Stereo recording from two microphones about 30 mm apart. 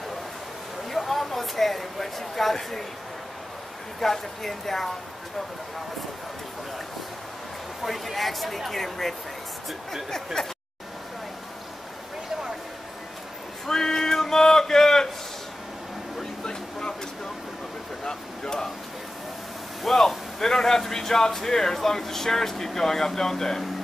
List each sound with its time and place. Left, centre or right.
0.9 s speech: centre
4.0 s speech: centre
7.8 s speech: centre
10.4 s speech: left
13.7 s a sound: centre
18.0 s a sound: centre
19.8 s speech: centre